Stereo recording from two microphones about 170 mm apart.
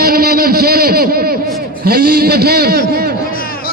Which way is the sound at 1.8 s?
65° right (ahead or behind).